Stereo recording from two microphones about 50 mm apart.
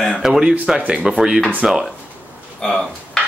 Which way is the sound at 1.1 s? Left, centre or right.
Centre.